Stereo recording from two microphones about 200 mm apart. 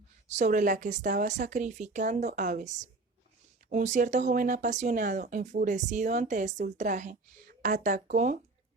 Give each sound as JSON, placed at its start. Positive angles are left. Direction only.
{"t": 0.3, "sound": "speech", "side_deg": -35}